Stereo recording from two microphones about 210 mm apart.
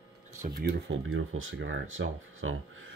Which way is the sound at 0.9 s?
70° right (ahead or behind).